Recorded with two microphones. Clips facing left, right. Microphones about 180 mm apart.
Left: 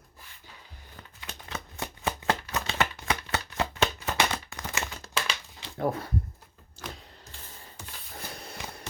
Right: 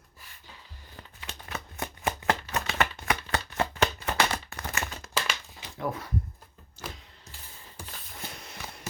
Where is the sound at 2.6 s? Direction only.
20° left (ahead or behind).